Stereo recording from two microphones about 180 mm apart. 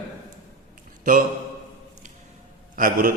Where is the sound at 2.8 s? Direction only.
50° right (ahead or behind).